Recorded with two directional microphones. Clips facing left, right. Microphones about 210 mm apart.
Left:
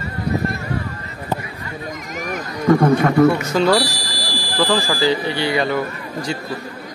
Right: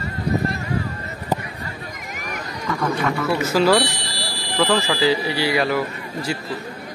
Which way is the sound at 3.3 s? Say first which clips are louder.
Left 1 dB; 5° right (ahead or behind).